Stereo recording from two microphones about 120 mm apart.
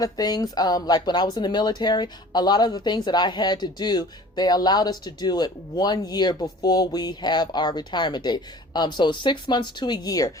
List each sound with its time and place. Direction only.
0.0 s speech: 35° left (ahead or behind)